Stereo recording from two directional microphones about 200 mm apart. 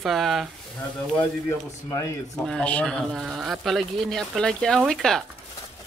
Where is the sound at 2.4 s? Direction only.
5° left (ahead or behind).